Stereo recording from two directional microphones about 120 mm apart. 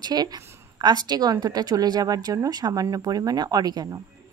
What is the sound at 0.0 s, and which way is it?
A woman's voice, 35° right (ahead or behind).